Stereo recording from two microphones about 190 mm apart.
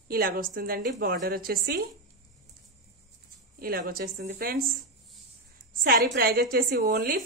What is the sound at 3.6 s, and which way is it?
A woman's voice, 50° right (ahead or behind).